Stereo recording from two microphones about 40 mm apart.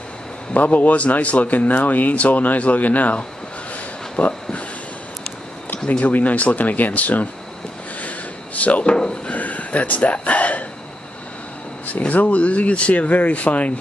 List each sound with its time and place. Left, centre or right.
0.5 s a man's voice: left
5.9 s a man's voice: left
8.5 s a man's voice: left
8.8 s speech: centre
9.3 s a sound: left
12.1 s a man's voice: left